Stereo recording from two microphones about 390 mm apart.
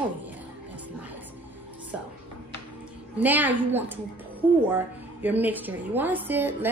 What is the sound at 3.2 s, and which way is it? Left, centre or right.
A woman's voice, centre.